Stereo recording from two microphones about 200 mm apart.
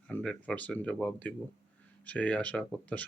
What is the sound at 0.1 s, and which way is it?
Speech, 5° left (ahead or behind).